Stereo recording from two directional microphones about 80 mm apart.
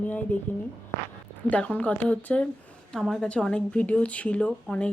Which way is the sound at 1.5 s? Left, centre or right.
Centre.